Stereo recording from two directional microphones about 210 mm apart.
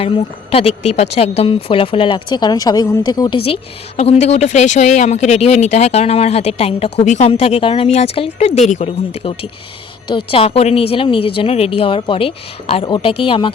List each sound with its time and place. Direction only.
0.0 s speech: 25° left (ahead or behind)